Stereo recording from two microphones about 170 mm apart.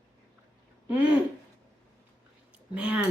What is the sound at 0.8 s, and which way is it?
Speech, 10° right (ahead or behind).